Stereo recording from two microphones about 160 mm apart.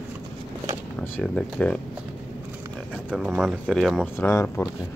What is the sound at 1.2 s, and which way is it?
Speech, 5° left (ahead or behind).